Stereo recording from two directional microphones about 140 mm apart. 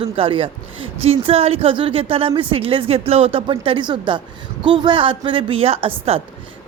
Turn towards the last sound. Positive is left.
turn(degrees=-45)  # may be behind; listen again after turning